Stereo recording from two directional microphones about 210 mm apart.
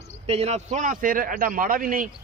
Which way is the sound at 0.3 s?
30° right (ahead or behind).